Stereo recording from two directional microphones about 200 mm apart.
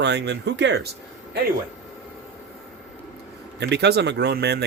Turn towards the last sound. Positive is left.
turn(degrees=-55)  # may be behind; listen again after turning